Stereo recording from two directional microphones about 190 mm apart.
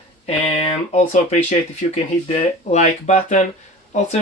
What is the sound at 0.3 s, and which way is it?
Speech, 35° left (ahead or behind).